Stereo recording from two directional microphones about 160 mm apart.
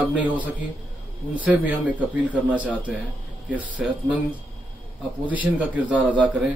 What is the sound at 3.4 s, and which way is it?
Speech, 10° right (ahead or behind).